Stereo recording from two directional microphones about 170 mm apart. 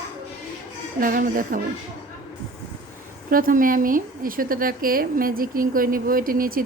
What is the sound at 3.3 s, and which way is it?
A woman's voice, 55° right (ahead or behind).